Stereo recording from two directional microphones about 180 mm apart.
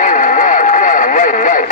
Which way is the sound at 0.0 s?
45° left (ahead or behind).